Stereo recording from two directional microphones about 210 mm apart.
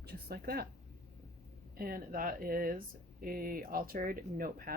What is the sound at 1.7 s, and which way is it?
Speech, 45° right (ahead or behind).